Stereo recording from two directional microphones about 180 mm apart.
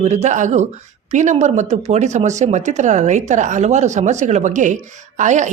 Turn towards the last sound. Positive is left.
turn(degrees=-40)  # may be behind; listen again after turning